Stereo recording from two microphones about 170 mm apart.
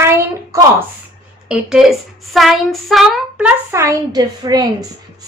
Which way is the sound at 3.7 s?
20° right (ahead or behind).